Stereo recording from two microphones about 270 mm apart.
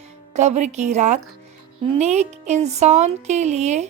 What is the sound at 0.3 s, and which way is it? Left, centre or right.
Speech, right.